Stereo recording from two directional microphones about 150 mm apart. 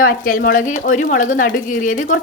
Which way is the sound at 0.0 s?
75° left (ahead or behind).